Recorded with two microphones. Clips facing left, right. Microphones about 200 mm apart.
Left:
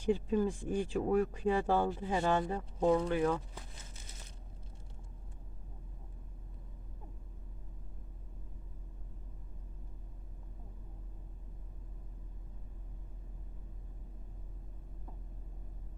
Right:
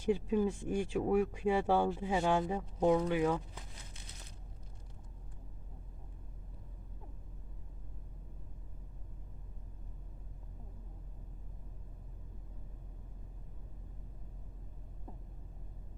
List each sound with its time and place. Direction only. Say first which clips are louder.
0.1 s speech: even; 10° right (ahead or behind)